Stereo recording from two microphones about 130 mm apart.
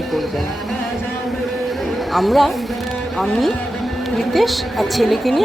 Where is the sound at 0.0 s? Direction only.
Centre (ahead or behind).